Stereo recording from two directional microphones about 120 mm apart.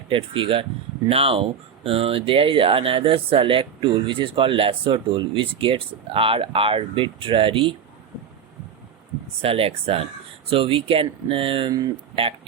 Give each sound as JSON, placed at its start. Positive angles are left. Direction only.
{"t": 0.1, "sound": "speech", "side_deg": -50}
{"t": 9.4, "sound": "speech", "side_deg": -55}